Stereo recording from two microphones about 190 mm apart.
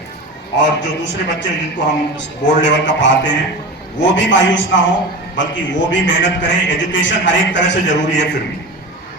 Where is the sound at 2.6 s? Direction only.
70° left (ahead or behind).